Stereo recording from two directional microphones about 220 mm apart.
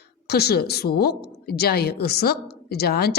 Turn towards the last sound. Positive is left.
turn(degrees=45)  # may be behind; listen again after turning